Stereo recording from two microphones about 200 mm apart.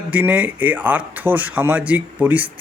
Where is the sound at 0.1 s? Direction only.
10° right (ahead or behind).